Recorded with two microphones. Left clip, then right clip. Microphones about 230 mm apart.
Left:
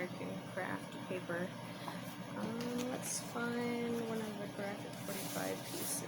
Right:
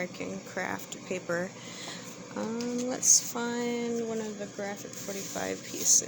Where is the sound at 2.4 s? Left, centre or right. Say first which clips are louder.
Right 8 dB; right.